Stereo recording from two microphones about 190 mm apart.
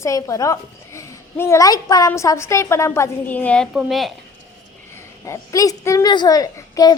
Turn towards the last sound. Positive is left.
turn(degrees=20)  # may be behind; listen again after turning